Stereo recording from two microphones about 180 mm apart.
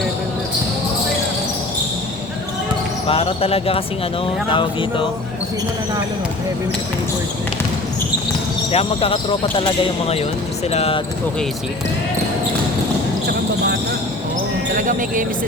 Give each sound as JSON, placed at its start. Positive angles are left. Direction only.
{"t": 3.1, "sound": "speech", "side_deg": 30}
{"t": 8.7, "sound": "speech", "side_deg": 30}
{"t": 14.8, "sound": "speech", "side_deg": -50}